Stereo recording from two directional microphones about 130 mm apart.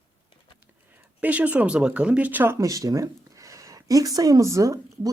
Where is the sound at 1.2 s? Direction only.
10° right (ahead or behind).